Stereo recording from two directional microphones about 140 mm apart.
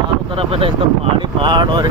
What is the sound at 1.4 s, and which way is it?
Speech, 35° right (ahead or behind).